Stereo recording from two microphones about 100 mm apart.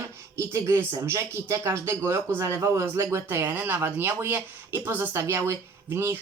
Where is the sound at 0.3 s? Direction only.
30° right (ahead or behind).